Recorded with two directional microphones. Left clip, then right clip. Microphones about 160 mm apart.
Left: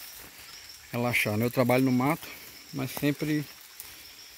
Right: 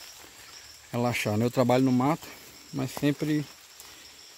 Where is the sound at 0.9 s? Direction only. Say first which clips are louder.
Left 1 dB; 15° right (ahead or behind).